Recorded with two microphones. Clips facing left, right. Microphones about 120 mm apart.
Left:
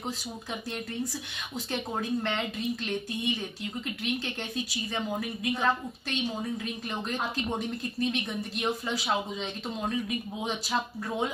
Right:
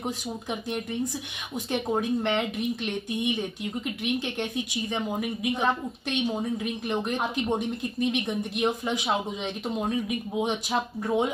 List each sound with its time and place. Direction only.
1.7 s a woman's voice: 15° right (ahead or behind)